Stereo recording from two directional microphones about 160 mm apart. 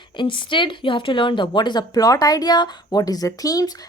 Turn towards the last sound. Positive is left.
turn(degrees=20)  # may be behind; listen again after turning